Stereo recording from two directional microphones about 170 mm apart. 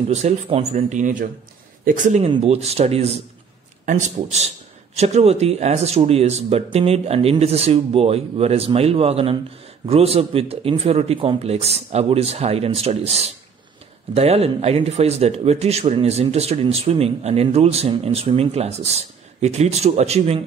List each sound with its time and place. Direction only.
0.1 s speech: 40° right (ahead or behind)